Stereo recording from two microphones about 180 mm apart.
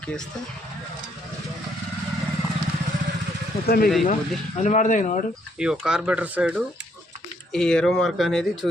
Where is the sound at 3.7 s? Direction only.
55° left (ahead or behind).